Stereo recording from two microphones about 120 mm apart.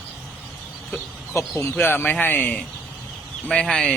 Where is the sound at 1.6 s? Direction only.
20° left (ahead or behind).